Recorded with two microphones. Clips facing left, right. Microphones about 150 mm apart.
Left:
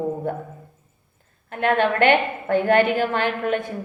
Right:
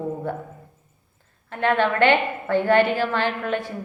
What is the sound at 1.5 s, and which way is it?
A woman's voice, 20° left (ahead or behind).